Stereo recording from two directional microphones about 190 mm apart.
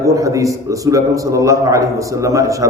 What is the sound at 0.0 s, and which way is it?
A man's voice, 15° right (ahead or behind).